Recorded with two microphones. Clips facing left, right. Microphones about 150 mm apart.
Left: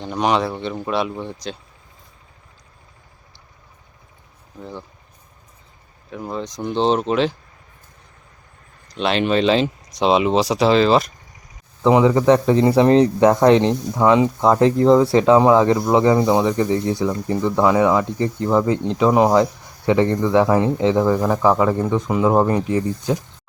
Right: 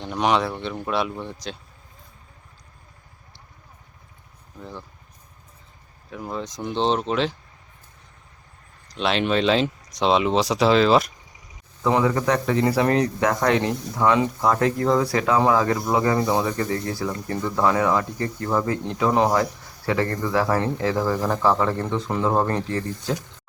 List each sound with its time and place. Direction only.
0.0 s speech: centre (ahead or behind)
6.1 s speech: centre (ahead or behind)
9.0 s speech: centre (ahead or behind)
11.8 s speech: 20° left (ahead or behind)